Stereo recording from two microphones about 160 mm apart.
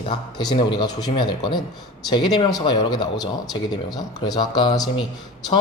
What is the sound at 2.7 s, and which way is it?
Speech, 25° left (ahead or behind).